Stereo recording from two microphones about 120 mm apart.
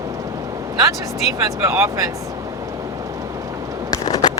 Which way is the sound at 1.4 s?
25° right (ahead or behind).